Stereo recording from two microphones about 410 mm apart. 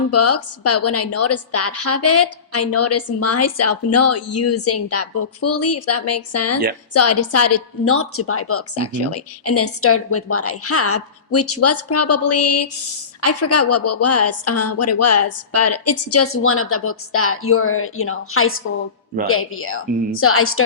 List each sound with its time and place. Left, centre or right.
0.1 s a woman's voice: left